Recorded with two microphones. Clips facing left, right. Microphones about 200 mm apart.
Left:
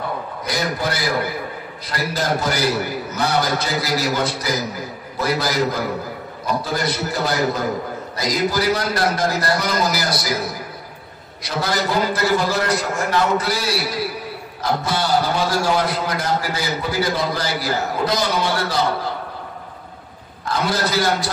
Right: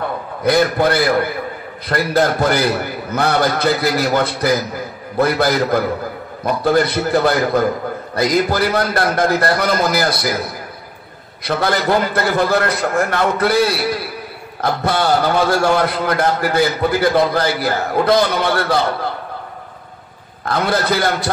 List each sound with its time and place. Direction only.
0.4 s a man's voice: 55° right (ahead or behind)
20.4 s a man's voice: 55° right (ahead or behind)